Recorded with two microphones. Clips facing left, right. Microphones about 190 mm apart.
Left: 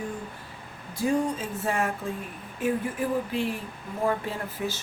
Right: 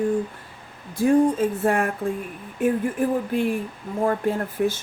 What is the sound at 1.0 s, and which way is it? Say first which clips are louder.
Speech: right 8 dB; 55° right (ahead or behind).